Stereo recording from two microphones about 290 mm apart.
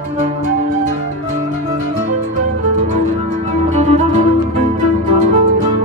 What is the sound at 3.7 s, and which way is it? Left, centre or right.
Music, right.